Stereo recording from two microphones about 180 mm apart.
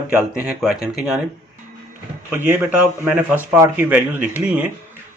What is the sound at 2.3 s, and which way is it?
Speech, 10° right (ahead or behind).